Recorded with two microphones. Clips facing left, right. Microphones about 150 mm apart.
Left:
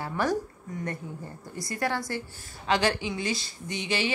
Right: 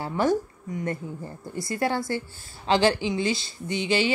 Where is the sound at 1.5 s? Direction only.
25° right (ahead or behind).